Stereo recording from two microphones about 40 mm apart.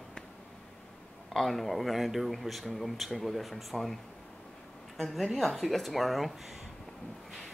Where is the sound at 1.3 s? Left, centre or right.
Centre.